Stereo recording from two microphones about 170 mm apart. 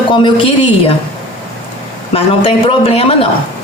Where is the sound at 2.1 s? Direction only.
35° left (ahead or behind).